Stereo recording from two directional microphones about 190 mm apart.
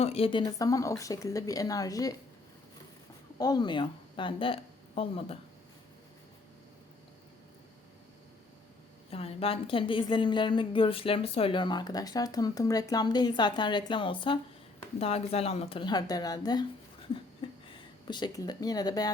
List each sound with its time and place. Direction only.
0.0 s a woman's voice: 30° left (ahead or behind)
3.3 s a woman's voice: 20° left (ahead or behind)
9.0 s a woman's voice: 30° left (ahead or behind)